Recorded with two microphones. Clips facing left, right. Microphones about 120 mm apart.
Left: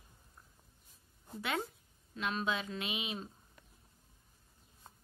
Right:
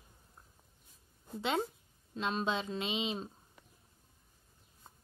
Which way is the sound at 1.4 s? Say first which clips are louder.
Right 4 dB; 25° right (ahead or behind).